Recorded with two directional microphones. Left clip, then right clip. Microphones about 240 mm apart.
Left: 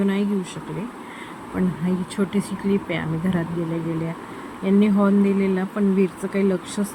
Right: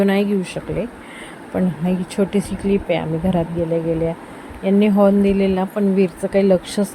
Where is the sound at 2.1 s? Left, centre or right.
Centre.